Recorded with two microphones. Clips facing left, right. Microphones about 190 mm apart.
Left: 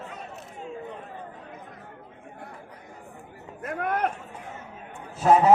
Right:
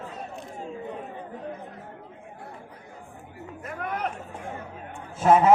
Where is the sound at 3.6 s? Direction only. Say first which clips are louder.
Left 4 dB; 55° left (ahead or behind).